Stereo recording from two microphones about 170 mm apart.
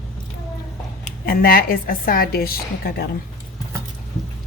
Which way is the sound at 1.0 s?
60° left (ahead or behind).